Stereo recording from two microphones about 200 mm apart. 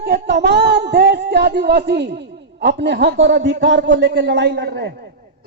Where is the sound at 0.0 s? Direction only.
55° right (ahead or behind).